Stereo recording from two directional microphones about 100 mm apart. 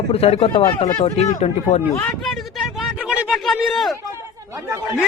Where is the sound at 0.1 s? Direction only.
85° left.